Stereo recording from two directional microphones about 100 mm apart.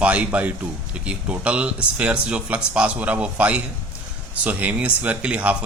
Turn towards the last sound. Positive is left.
turn(degrees=-15)  # may be behind; listen again after turning